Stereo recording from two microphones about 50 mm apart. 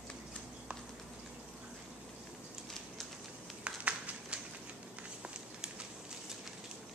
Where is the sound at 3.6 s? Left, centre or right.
Right.